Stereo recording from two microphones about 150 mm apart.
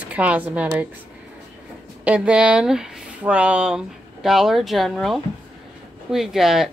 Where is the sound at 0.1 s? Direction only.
10° right (ahead or behind).